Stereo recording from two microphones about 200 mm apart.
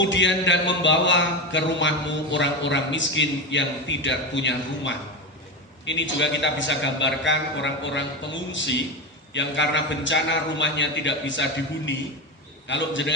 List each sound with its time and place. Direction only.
0.0 s a man's voice: 65° left (ahead or behind)
12.6 s a man's voice: 65° left (ahead or behind)